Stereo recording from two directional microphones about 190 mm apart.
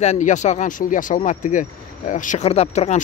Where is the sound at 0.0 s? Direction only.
40° left (ahead or behind).